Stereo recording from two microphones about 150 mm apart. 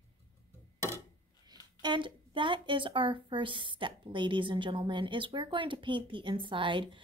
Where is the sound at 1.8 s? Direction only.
30° right (ahead or behind).